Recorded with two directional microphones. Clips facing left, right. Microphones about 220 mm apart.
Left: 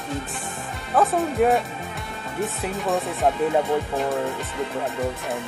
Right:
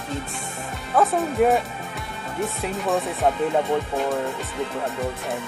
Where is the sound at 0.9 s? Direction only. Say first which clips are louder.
Even; centre (ahead or behind).